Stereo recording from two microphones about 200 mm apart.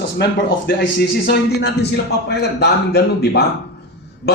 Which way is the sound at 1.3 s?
55° left (ahead or behind).